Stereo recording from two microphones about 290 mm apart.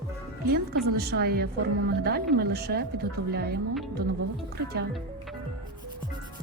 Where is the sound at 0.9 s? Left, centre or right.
Right.